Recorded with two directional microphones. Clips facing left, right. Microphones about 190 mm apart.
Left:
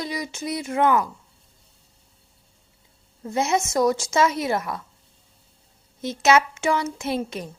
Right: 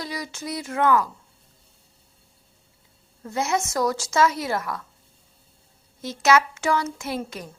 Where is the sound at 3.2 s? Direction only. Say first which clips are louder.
Left 2 dB; 20° left (ahead or behind).